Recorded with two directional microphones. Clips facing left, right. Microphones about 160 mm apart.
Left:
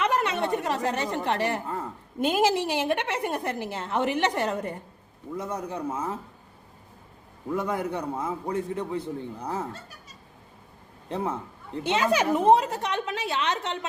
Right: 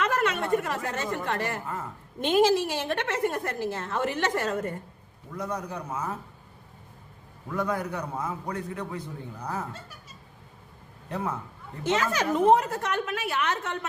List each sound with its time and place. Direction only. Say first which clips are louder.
0.0 s a woman's voice: left 1 dB; 15° left (ahead or behind)
5.4 s a man's voice: left 1 dB; 25° left (ahead or behind)
7.5 s a man's voice: left 1 dB; 25° left (ahead or behind)
11.1 s a man's voice: left 2 dB; 25° left (ahead or behind)
11.9 s a woman's voice: left 2 dB; 15° left (ahead or behind)